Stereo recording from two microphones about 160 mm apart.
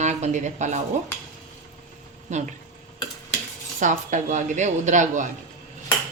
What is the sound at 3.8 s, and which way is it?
A woman's voice, 50° right (ahead or behind).